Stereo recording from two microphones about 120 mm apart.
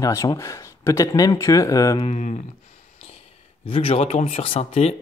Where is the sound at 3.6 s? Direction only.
50° left (ahead or behind).